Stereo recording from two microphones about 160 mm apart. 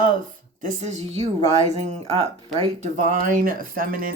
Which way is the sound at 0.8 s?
45° right (ahead or behind).